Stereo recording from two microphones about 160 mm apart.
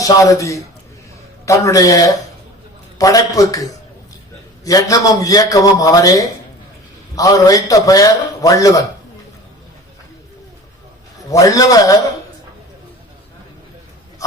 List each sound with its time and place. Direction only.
0.0 s a man's voice: 20° left (ahead or behind)
11.3 s a man's voice: 20° left (ahead or behind)